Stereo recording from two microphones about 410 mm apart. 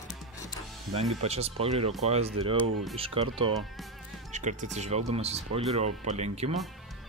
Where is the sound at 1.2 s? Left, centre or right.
Centre.